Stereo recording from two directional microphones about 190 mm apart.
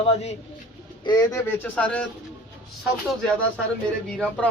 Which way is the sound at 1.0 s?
20° left (ahead or behind).